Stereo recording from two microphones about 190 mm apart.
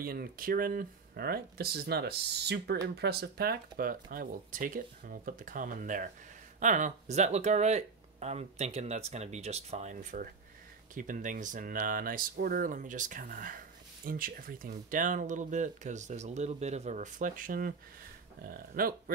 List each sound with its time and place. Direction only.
0.0 s speech: 50° right (ahead or behind)